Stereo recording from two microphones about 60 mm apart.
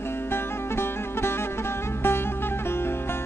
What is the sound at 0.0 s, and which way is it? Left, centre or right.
Music, left.